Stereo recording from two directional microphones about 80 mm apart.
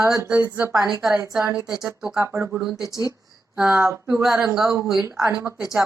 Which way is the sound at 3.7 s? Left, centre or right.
Right.